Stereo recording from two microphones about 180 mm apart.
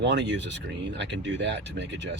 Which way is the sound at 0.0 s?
75° right (ahead or behind).